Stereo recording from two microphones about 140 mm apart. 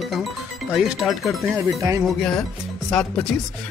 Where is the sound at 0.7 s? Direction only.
Centre (ahead or behind).